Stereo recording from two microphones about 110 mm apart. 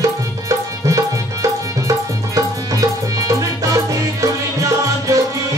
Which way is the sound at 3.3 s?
30° right (ahead or behind).